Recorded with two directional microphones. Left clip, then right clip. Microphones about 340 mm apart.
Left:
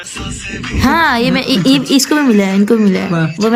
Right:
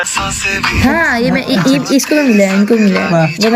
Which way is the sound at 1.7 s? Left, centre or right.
Left.